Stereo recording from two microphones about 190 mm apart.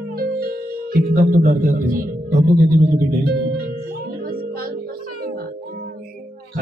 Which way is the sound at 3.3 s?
50° right (ahead or behind).